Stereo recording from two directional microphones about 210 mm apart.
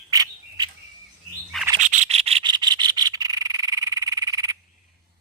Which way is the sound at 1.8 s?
35° right (ahead or behind).